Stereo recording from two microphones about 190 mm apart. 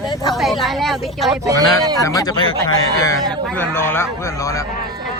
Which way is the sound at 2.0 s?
20° left (ahead or behind).